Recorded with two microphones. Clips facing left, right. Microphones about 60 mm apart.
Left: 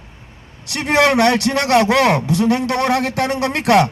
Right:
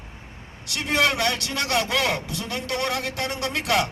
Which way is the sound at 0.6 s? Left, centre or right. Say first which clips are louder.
Left 8 dB; left.